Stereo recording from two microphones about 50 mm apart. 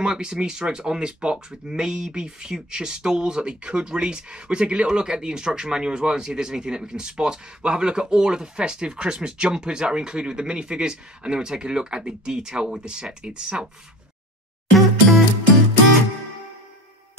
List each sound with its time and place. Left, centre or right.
0.0 s speech: centre
14.7 s music: centre